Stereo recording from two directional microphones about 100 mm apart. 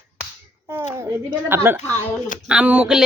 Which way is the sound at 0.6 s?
25° right (ahead or behind).